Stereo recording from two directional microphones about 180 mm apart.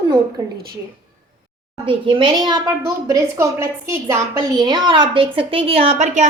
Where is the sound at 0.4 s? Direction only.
20° right (ahead or behind).